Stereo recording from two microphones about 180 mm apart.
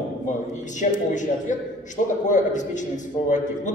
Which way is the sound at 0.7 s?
45° left (ahead or behind).